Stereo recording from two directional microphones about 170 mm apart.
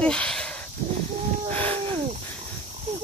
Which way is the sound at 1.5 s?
10° left (ahead or behind).